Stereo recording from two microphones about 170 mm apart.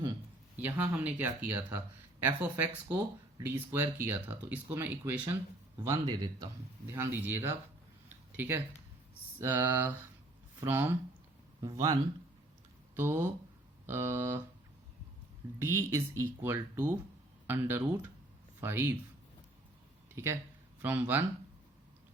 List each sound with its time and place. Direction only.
0.6 s a man's voice: 10° right (ahead or behind)
6.9 s a man's voice: 15° right (ahead or behind)
13.0 s speech: 15° right (ahead or behind)
15.5 s speech: 15° right (ahead or behind)
20.1 s speech: 15° right (ahead or behind)